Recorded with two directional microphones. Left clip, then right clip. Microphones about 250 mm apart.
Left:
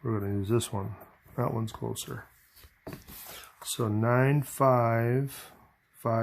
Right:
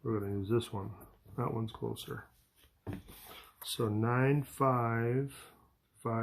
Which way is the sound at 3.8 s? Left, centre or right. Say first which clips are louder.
Left 6 dB; left.